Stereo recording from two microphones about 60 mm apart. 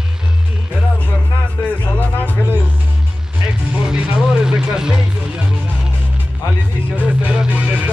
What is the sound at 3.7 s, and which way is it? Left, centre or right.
Music, centre.